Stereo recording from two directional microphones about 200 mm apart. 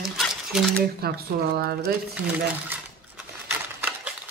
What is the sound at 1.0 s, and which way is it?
Speech, 50° right (ahead or behind).